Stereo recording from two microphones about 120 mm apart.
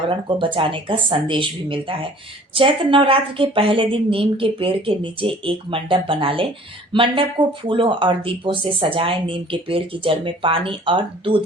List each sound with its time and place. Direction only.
0.1 s a woman's voice: 45° right (ahead or behind)